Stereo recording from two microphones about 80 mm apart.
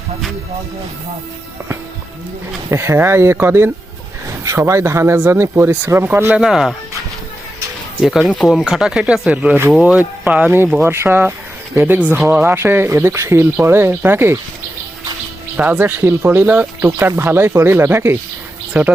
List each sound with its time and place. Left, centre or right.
2.6 s speech: right
6.3 s speech: centre
8.0 s speech: centre
10.8 s speech: right
15.5 s speech: right
18.8 s speech: centre